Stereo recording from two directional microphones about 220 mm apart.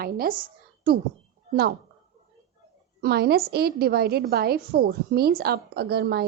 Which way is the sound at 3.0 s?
45° right (ahead or behind).